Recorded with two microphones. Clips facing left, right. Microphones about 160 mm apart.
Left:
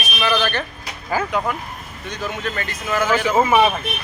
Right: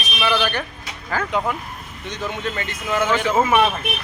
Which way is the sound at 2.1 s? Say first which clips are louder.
Even; 20° right (ahead or behind).